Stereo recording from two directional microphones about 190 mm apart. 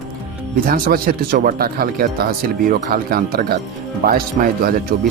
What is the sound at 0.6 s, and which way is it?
Speech, 50° right (ahead or behind).